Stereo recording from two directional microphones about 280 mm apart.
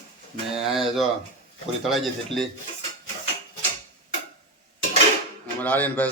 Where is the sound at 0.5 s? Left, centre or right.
Centre.